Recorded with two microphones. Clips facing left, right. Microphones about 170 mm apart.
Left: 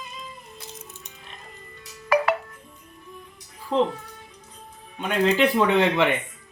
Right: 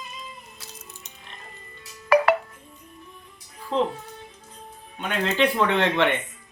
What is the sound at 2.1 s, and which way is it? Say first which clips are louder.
Music: right 3 dB; 65° right (ahead or behind).